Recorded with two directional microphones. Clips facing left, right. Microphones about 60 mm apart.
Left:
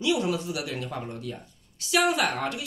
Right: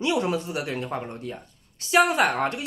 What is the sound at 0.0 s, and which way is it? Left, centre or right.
Speech, right.